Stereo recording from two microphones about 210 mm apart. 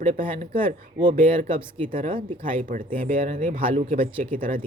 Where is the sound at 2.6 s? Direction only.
40° right (ahead or behind).